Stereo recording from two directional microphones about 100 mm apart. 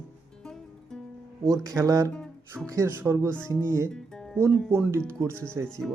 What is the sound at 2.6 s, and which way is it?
Speech, 30° right (ahead or behind).